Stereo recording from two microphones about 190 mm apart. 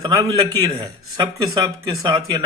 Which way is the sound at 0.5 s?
20° right (ahead or behind).